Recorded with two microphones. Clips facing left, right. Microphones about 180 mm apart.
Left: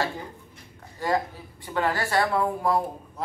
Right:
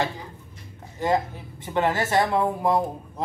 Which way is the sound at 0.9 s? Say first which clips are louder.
Right 3 dB; 20° right (ahead or behind).